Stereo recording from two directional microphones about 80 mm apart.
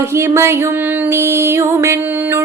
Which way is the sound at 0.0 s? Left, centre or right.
Right.